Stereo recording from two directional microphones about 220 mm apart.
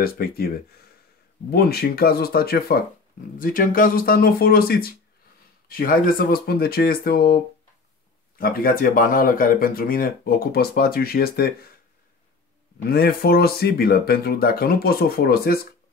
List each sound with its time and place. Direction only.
0.0 s speech: 45° left (ahead or behind)
1.5 s speech: 45° left (ahead or behind)
12.7 s speech: 45° left (ahead or behind)